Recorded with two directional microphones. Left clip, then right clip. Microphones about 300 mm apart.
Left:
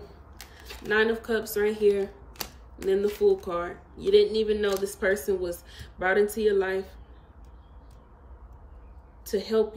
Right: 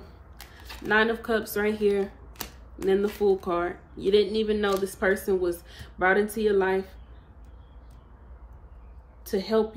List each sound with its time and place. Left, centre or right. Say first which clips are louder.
0.6 s speech: right 1 dB; centre
2.4 s a sound: left 1 dB; centre
2.9 s speech: even; centre
9.2 s a woman's voice: even; centre